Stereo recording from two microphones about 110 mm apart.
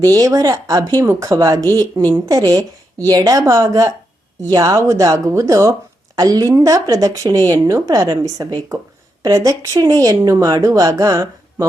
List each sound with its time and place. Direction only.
0.2 s speech: 30° right (ahead or behind)